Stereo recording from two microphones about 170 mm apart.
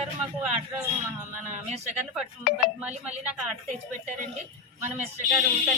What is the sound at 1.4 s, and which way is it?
Speech, 45° right (ahead or behind).